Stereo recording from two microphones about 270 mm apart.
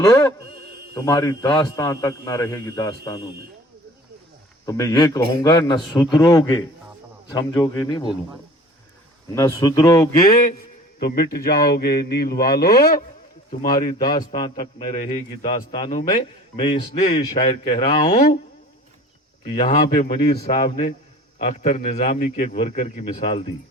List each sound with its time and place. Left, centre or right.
0.9 s a man's voice: centre
4.6 s a man's voice: centre
9.3 s a man's voice: centre
11.0 s speech: left
14.0 s a man's voice: centre
19.5 s a man's voice: left